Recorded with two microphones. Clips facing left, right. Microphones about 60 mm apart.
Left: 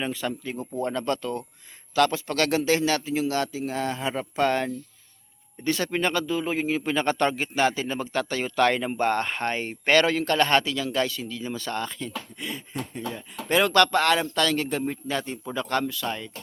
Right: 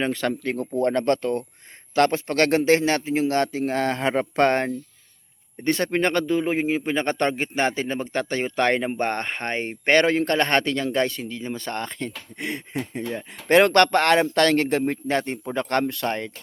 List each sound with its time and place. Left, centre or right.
0.0 s speech: right
13.1 s speech: right